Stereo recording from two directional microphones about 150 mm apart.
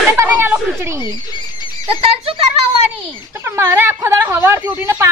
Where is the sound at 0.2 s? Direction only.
15° right (ahead or behind).